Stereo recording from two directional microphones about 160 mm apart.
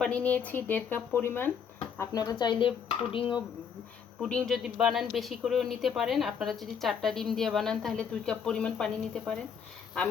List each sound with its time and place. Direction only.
0.0 s speech: 5° left (ahead or behind); by 3.3 s 35° left (ahead or behind)
4.2 s speech: 5° left (ahead or behind)